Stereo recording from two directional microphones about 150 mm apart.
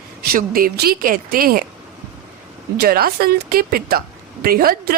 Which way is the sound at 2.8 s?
90° right.